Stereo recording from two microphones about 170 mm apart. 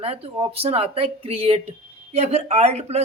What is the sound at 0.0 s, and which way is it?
Speech, 35° right (ahead or behind).